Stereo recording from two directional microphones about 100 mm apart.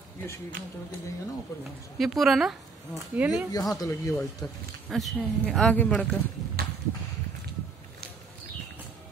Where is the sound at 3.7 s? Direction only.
35° left (ahead or behind).